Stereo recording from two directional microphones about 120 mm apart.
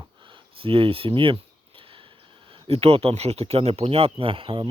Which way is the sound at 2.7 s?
55° right (ahead or behind).